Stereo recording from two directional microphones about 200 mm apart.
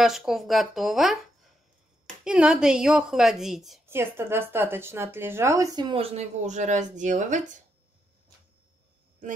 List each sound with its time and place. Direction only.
0.0 s speech: centre (ahead or behind)
3.8 s speech: 10° right (ahead or behind); by 7.5 s 40° right (ahead or behind)